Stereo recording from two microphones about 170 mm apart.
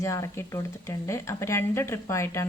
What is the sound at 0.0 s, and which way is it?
Speech, 15° left (ahead or behind).